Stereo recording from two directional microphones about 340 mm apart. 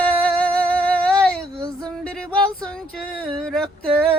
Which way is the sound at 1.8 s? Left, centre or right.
Centre.